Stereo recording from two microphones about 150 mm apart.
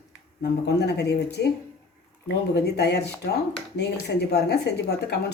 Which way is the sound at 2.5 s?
90° left.